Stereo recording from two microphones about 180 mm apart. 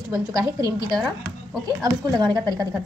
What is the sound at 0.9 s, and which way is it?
Speech, centre (ahead or behind).